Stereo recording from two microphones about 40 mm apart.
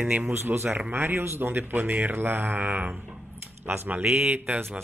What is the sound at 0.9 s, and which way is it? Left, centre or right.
Speech, right.